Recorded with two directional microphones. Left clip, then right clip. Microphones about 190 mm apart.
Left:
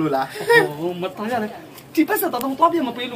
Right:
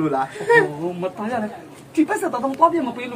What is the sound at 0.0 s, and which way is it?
Speech, 5° left (ahead or behind).